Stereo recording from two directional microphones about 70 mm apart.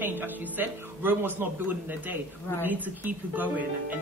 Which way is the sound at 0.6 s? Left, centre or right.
Right.